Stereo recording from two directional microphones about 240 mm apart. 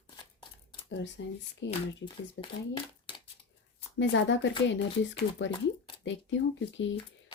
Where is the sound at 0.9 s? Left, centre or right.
Left.